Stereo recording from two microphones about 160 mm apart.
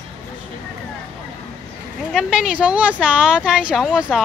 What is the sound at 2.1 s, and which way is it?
Speech, 5° right (ahead or behind).